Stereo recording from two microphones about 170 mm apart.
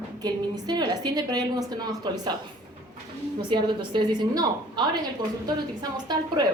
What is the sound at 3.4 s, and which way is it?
A woman's voice, 30° right (ahead or behind).